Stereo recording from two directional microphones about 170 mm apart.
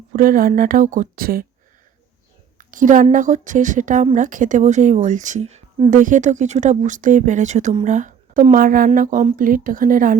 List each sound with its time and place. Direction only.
0.1 s speech: 55° right (ahead or behind)
2.6 s a woman's voice: 50° right (ahead or behind)